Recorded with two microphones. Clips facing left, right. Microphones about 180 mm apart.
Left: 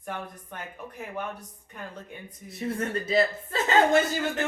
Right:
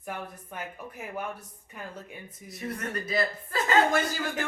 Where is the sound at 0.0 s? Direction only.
5° right (ahead or behind).